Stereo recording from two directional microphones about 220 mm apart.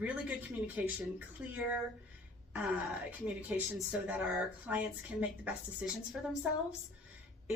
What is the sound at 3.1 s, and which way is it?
A woman's voice, 5° right (ahead or behind).